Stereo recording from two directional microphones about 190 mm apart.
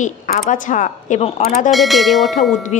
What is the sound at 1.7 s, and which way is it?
Speech, centre (ahead or behind).